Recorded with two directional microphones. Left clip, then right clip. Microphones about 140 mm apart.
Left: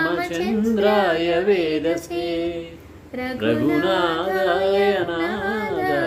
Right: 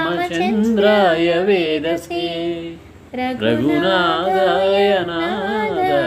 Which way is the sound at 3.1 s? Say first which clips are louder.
Right 4 dB; 20° right (ahead or behind).